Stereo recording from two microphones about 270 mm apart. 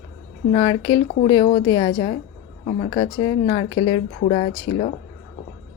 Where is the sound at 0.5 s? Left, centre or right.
Centre.